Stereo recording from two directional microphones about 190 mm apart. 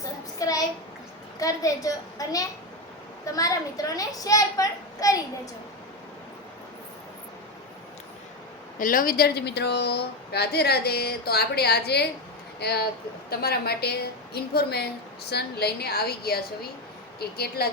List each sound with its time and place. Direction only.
0.0 s child singing: 20° left (ahead or behind)
1.4 s a woman's voice: 15° left (ahead or behind)
8.8 s a woman's voice: 45° left (ahead or behind)